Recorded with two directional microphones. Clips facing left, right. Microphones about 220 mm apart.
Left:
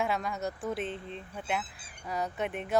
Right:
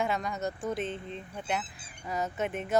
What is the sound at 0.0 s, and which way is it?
Speech, centre (ahead or behind).